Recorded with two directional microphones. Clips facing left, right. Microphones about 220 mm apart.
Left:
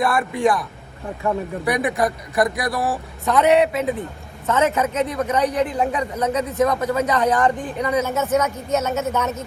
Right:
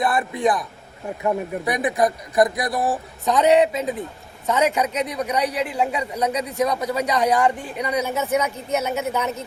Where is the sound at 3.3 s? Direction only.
15° right (ahead or behind).